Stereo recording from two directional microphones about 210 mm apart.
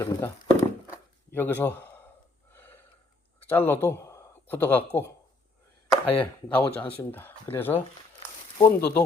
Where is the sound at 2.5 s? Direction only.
10° left (ahead or behind).